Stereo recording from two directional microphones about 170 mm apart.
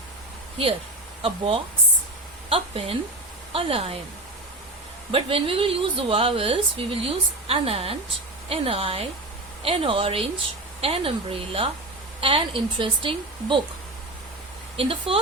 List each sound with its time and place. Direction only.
1.2 s speech: 30° right (ahead or behind)
5.1 s speech: 35° right (ahead or behind)
14.8 s speech: 30° right (ahead or behind)